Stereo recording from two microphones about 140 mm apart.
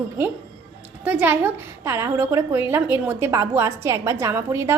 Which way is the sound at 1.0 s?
10° right (ahead or behind).